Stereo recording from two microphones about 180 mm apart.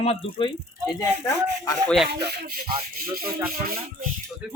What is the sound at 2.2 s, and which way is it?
Speech, 60° right (ahead or behind).